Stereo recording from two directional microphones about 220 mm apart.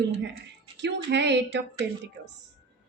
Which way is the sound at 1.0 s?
50° right (ahead or behind).